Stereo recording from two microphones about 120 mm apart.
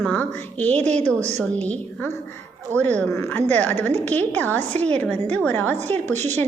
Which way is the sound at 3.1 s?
20° left (ahead or behind).